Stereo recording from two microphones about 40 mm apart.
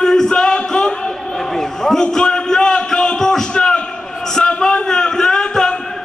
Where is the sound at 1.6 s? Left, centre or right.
Centre.